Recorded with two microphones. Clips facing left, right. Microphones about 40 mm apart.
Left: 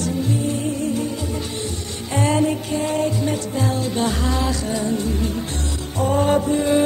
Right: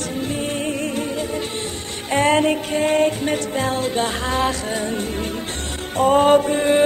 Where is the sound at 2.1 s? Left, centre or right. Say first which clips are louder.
Right 3 dB; right.